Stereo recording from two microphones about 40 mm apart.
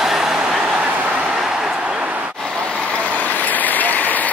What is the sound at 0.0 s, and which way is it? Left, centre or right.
Train, centre.